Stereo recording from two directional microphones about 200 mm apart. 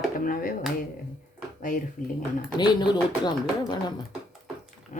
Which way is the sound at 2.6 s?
20° left (ahead or behind).